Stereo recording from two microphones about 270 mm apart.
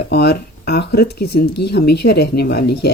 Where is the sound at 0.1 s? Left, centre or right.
Left.